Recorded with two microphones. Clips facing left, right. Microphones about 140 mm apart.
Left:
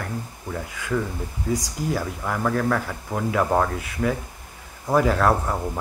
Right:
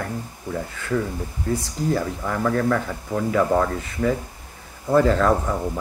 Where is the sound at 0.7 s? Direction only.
10° left (ahead or behind).